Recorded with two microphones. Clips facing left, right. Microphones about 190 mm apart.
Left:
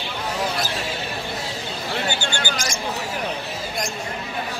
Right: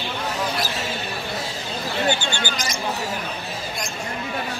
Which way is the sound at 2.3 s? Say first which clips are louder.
Left 1 dB; 50° left (ahead or behind).